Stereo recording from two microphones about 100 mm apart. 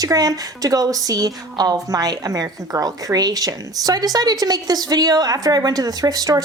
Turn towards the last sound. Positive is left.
turn(degrees=-40)  # may be behind; listen again after turning